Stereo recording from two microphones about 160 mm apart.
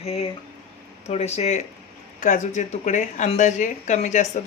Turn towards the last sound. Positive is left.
turn(degrees=45)  # may be behind; listen again after turning